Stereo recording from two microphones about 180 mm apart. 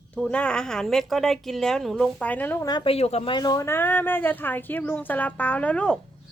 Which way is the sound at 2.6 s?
25° left (ahead or behind).